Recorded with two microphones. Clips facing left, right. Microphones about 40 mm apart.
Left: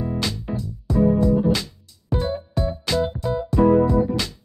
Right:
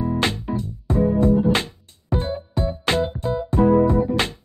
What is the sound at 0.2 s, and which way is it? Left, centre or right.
Music, right.